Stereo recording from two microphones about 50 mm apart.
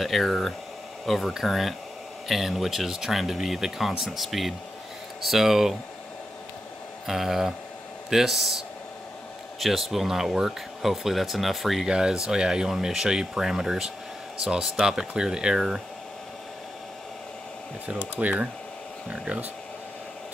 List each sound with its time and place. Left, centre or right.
0.0 s speech: centre
7.1 s speech: centre
9.6 s speech: centre
11.9 s speech: centre
18.2 s speech: right